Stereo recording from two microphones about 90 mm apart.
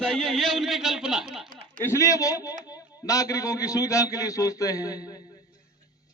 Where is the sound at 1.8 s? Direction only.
35° left (ahead or behind).